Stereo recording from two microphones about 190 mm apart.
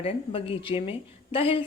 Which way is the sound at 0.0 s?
30° left (ahead or behind).